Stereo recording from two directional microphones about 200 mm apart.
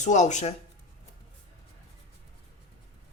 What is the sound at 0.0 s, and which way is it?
Speech, 35° left (ahead or behind).